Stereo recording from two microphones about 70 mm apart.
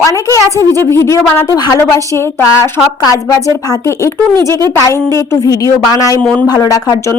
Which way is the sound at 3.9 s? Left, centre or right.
Left.